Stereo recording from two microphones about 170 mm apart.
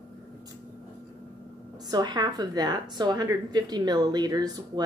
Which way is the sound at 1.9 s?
25° right (ahead or behind).